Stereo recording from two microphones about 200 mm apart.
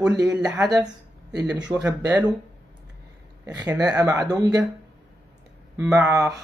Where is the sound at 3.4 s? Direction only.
10° right (ahead or behind).